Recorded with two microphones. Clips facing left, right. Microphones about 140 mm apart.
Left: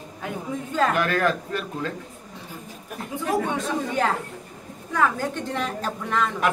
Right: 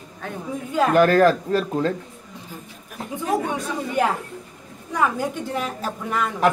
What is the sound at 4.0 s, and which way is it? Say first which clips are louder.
A woman's voice: right 2 dB; 10° right (ahead or behind).